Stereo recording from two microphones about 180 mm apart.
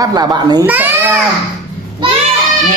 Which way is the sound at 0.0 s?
20° right (ahead or behind).